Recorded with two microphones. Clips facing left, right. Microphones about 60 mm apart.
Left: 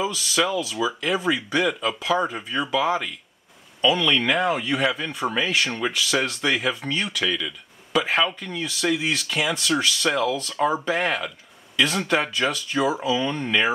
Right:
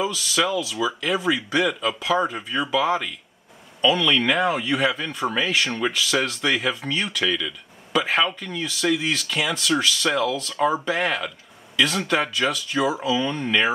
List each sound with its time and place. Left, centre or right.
0.1 s speech: centre
2.0 s speech: centre
2.2 s speech: centre